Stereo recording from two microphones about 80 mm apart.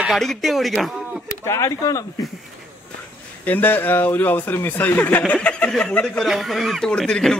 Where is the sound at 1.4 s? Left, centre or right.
Left.